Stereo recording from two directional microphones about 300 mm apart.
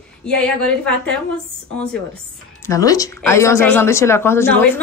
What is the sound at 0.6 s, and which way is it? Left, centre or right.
Speech, centre.